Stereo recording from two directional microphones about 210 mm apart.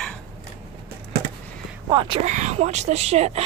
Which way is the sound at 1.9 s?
25° right (ahead or behind).